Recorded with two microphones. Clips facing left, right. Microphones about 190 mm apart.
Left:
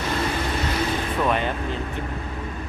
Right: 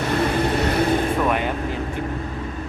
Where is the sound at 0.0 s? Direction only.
60° right (ahead or behind).